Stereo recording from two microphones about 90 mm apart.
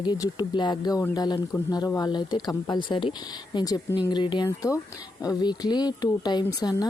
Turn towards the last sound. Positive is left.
turn(degrees=45)  # may be behind; listen again after turning